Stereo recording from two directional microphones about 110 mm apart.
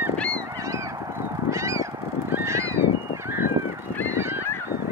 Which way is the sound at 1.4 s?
25° right (ahead or behind).